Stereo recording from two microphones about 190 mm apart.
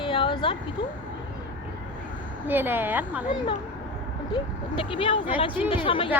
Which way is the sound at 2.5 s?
10° right (ahead or behind).